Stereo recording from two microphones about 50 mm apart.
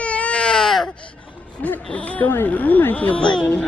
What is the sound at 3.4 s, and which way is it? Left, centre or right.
Music, centre.